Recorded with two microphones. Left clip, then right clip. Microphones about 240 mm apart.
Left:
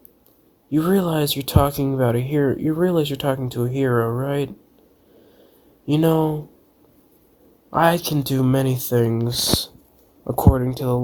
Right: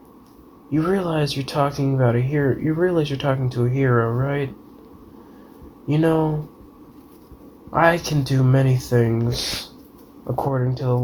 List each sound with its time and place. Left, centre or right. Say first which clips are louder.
0.7 s speech: left 1 dB; left
5.9 s speech: left 1 dB; left
7.7 s speech: even; left